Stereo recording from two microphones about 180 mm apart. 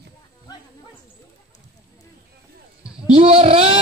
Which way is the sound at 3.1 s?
35° right (ahead or behind).